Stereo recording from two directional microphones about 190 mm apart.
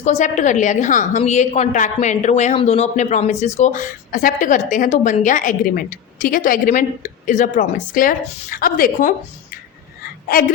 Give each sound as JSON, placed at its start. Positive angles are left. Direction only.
{"t": 0.0, "sound": "a woman's voice", "side_deg": 35}